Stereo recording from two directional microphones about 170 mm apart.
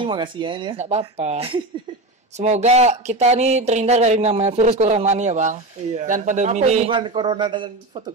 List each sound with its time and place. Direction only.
0.0 s speech: 30° right (ahead or behind)
0.7 s speech: 40° right (ahead or behind)
6.9 s speech: 30° right (ahead or behind)